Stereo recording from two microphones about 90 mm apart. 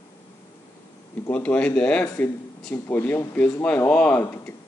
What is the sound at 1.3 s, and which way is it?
Speech, 15° left (ahead or behind).